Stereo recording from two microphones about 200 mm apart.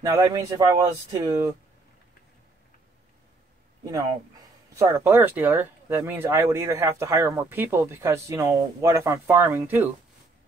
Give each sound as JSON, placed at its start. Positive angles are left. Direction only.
{"t": 0.0, "sound": "speech", "side_deg": -15}
{"t": 3.8, "sound": "speech", "side_deg": -15}